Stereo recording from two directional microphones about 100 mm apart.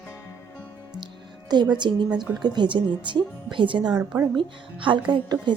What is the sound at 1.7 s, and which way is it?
A woman's voice, 50° right (ahead or behind).